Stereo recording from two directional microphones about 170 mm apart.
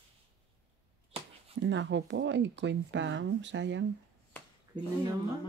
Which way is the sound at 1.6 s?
90° right.